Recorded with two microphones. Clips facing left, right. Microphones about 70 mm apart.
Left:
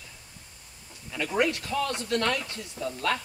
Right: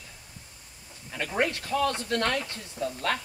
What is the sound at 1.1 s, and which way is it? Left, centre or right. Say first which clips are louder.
Speech: left 2 dB; right.